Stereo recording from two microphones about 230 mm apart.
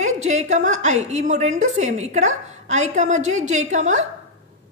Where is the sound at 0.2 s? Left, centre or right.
Right.